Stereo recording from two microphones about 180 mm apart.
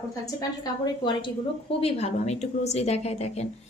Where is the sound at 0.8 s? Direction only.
25° left (ahead or behind).